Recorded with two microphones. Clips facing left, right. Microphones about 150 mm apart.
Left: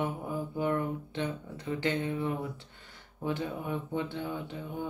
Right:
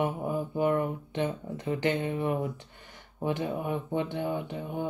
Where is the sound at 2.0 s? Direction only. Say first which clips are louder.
Right 3 dB; 55° right (ahead or behind).